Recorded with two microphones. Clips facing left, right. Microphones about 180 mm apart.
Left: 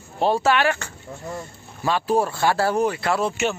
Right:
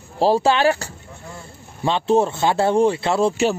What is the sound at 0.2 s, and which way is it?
Speech, 30° right (ahead or behind).